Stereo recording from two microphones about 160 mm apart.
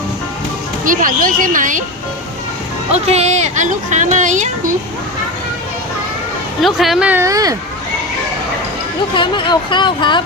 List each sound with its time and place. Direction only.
0.9 s speech: 60° right (ahead or behind)
2.9 s speech: 40° right (ahead or behind)
6.6 s speech: centre (ahead or behind)
7.1 s speech: 20° right (ahead or behind)
9.1 s speech: 30° left (ahead or behind)